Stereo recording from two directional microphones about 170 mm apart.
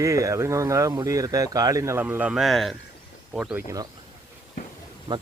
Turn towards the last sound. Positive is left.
turn(degrees=-25)  # may be behind; listen again after turning